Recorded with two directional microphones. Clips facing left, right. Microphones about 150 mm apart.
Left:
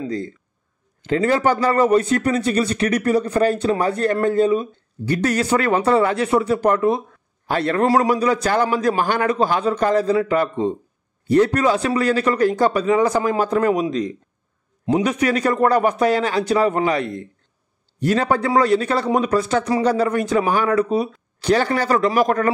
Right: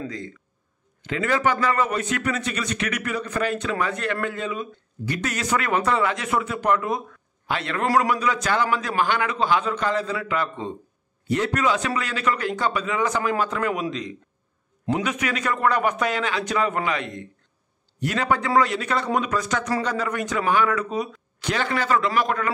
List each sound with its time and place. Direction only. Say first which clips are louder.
0.0 s a man's voice: left 7 dB; 35° left (ahead or behind)
7.8 s a man's voice: left 4 dB; 25° left (ahead or behind)
8.1 s a man's voice: left 5 dB; 40° left (ahead or behind)